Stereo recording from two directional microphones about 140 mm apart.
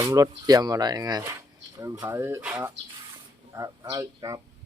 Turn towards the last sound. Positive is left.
turn(degrees=-25)  # may be behind; listen again after turning